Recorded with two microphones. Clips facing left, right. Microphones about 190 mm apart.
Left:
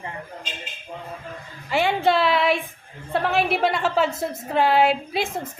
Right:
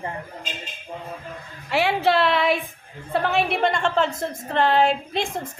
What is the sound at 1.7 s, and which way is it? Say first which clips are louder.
A woman's voice: even; centre (ahead or behind).